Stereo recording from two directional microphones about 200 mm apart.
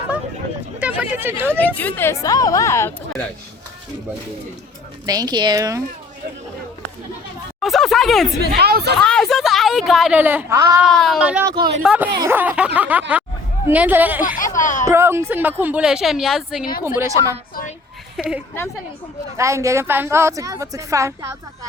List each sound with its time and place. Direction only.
0.8 s a woman's voice: 5° right (ahead or behind)
1.5 s speech: 10° left (ahead or behind)
5.0 s speech: 20° right (ahead or behind)
7.6 s a sound: centre (ahead or behind)
8.4 s speech: 50° right (ahead or behind)
9.0 s a sound: 5° left (ahead or behind); by 10.8 s 15° right (ahead or behind)
10.8 s a woman's voice: centre (ahead or behind)
14.3 s speech: 40° left (ahead or behind)
14.8 s a woman's voice: 10° right (ahead or behind)
17.0 s a woman's voice: 15° right (ahead or behind)
17.5 s a sound: 45° left (ahead or behind)
18.2 s speech: 5° right (ahead or behind)
19.4 s a woman's voice: 15° right (ahead or behind)